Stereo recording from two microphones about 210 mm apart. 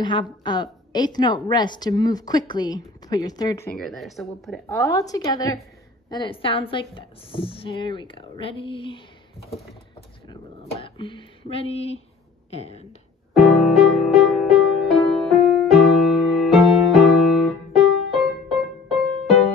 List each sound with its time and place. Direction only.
0.0 s a woman's voice: 20° left (ahead or behind)
3.7 s speech: centre (ahead or behind)
4.6 s a woman's voice: 15° left (ahead or behind)
10.3 s a woman's voice: 25° left (ahead or behind)
13.3 s music: centre (ahead or behind)